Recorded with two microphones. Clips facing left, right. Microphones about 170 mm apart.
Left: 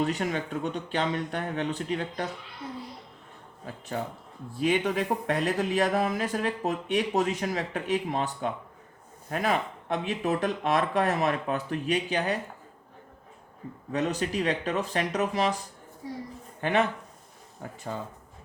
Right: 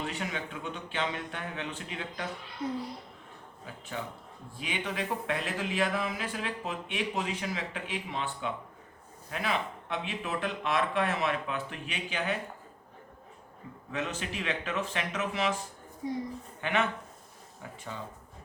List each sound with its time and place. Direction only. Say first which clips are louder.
0.0 s speech: left 8 dB; 40° left (ahead or behind)
3.9 s speech: left 5 dB; 40° left (ahead or behind)
13.9 s speech: left 7 dB; 40° left (ahead or behind)
16.0 s a woman's voice: right 4 dB; 15° right (ahead or behind)
16.6 s speech: left 5 dB; 40° left (ahead or behind)